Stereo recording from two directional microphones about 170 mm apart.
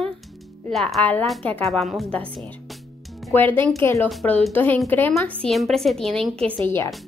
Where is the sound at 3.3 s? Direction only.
10° left (ahead or behind).